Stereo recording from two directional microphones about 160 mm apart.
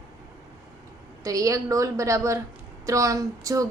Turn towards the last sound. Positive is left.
turn(degrees=-20)  # may be behind; listen again after turning